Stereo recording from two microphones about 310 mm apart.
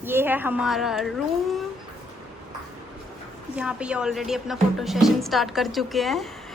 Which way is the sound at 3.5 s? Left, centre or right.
Centre.